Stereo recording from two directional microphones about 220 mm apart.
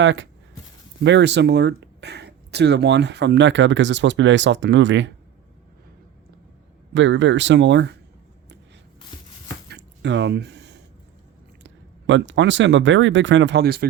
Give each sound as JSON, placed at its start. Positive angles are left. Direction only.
{"t": 0.0, "sound": "speech", "side_deg": -55}
{"t": 6.9, "sound": "speech", "side_deg": -55}
{"t": 9.6, "sound": "a sound", "side_deg": -50}
{"t": 11.6, "sound": "speech", "side_deg": -55}